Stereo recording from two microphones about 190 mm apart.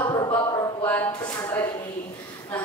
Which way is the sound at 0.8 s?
10° left (ahead or behind).